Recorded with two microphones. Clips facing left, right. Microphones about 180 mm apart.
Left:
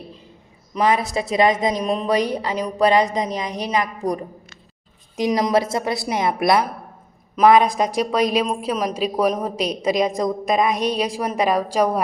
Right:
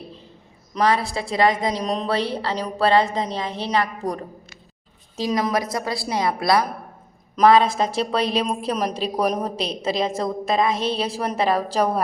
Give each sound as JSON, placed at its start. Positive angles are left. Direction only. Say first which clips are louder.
{"t": 0.7, "sound": "a woman's voice", "louder": "left 1 dB", "side_deg": 15}
{"t": 1.8, "sound": "a woman's voice", "louder": "left 3 dB", "side_deg": 10}
{"t": 5.3, "sound": "a woman's voice", "louder": "left 3 dB", "side_deg": 25}